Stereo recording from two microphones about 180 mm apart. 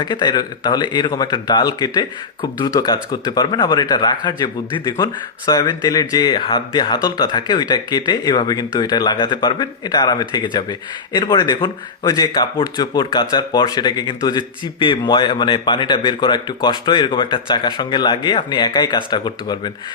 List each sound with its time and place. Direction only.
0.0 s speech: 25° left (ahead or behind)